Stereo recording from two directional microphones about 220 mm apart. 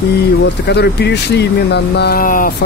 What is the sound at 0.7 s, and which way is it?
Speech, 50° left (ahead or behind).